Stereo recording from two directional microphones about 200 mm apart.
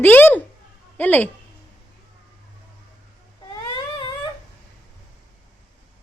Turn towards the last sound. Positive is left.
turn(degrees=20)  # may be behind; listen again after turning